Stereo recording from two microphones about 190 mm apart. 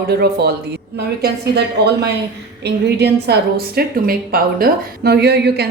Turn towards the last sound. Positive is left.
turn(degrees=-60)  # may be behind; listen again after turning